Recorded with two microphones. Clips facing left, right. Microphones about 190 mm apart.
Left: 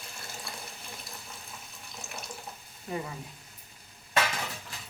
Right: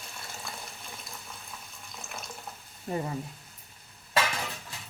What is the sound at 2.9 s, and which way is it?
Speech, 35° right (ahead or behind).